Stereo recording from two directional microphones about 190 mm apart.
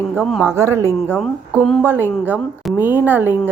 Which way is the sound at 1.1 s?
Centre (ahead or behind).